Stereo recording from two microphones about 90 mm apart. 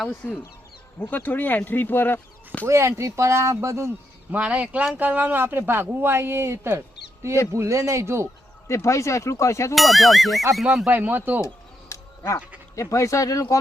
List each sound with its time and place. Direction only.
0.2 s speech: 10° left (ahead or behind)
0.9 s speech: 20° left (ahead or behind)
2.6 s speech: 30° right (ahead or behind)
4.3 s speech: 15° right (ahead or behind); by 8.3 s 30° right (ahead or behind)
8.6 s speech: 35° left (ahead or behind)
9.7 s speech: centre (ahead or behind)
10.8 s speech: 20° right (ahead or behind)
11.3 s a sound: 35° left (ahead or behind)
12.7 s speech: 35° left (ahead or behind)